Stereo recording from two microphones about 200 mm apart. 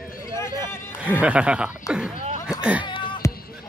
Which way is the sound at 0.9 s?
5° right (ahead or behind).